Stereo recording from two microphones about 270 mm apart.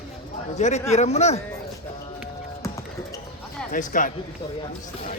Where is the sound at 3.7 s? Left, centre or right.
Left.